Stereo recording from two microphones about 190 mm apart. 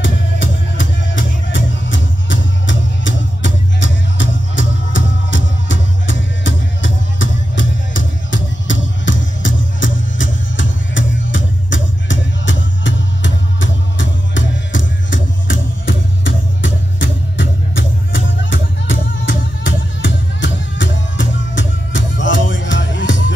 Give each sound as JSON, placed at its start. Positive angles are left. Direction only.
{"t": 0.0, "sound": "music", "side_deg": 75}